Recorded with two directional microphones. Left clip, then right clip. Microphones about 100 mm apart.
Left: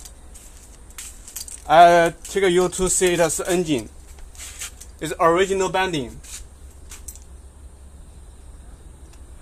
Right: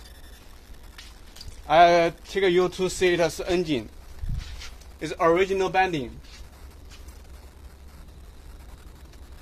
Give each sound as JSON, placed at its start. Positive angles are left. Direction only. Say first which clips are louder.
{"t": 1.7, "sound": "speech", "louder": "left 5 dB", "side_deg": 15}
{"t": 4.9, "sound": "speech", "louder": "left 4 dB", "side_deg": 15}